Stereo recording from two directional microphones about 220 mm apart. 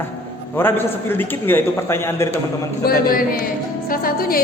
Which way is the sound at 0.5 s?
10° left (ahead or behind).